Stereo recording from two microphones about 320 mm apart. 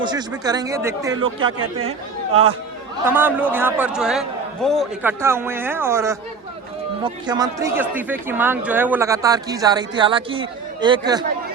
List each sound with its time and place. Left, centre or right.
0.0 s speech: centre
3.0 s speech: centre